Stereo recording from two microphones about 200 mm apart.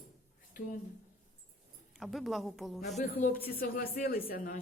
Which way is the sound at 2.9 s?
45° left (ahead or behind).